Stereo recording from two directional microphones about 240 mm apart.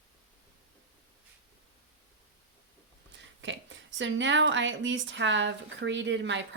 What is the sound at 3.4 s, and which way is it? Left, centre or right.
A woman's voice, right.